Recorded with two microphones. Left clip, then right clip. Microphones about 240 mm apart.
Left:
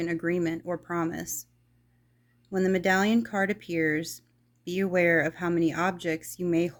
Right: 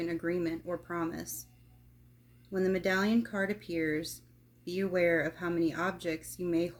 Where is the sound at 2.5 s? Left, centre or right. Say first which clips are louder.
Left 5 dB; left.